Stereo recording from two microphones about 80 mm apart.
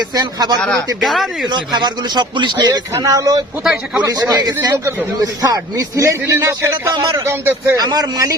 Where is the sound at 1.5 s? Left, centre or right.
Right.